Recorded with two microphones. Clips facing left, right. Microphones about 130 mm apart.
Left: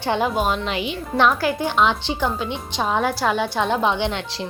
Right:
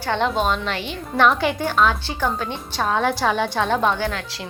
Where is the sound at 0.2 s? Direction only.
5° left (ahead or behind).